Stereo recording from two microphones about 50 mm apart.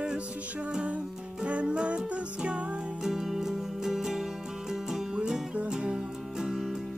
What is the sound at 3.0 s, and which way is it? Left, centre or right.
Music, centre.